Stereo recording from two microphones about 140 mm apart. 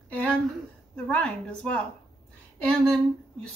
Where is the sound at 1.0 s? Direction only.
5° left (ahead or behind).